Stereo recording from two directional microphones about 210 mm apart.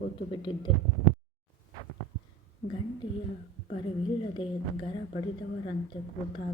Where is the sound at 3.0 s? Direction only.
20° left (ahead or behind).